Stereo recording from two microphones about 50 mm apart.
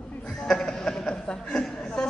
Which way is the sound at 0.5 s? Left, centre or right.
Centre.